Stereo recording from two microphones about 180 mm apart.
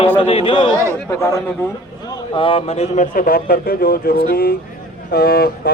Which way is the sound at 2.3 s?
30° left (ahead or behind).